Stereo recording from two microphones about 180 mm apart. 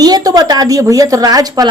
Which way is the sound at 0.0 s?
20° right (ahead or behind).